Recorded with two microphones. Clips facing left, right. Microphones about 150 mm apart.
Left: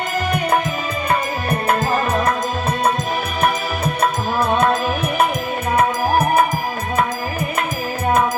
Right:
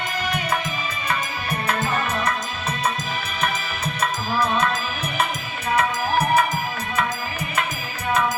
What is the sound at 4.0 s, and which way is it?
Music, 55° left (ahead or behind).